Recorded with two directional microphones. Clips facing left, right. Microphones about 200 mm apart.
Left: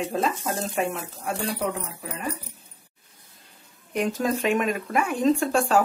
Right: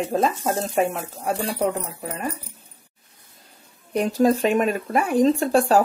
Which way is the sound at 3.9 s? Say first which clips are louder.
Right 6 dB; 35° right (ahead or behind).